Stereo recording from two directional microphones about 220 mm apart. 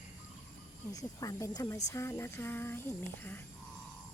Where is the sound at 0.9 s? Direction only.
15° left (ahead or behind).